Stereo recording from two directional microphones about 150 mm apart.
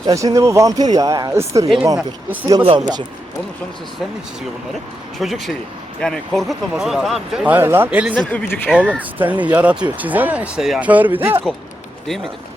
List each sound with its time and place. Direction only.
0.0 s speech: 25° right (ahead or behind)
5.2 s speech: centre (ahead or behind)
8.1 s speech: 10° left (ahead or behind)
9.0 s speech: 10° right (ahead or behind)